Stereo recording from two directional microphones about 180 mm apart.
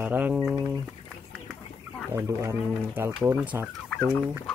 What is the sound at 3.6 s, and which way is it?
Turkey, 10° left (ahead or behind).